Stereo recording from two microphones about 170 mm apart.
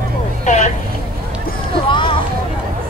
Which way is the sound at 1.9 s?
30° left (ahead or behind).